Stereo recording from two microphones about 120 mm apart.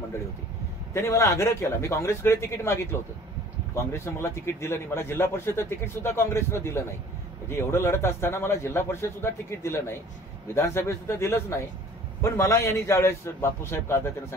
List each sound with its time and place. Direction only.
0.9 s a man's voice: 20° left (ahead or behind)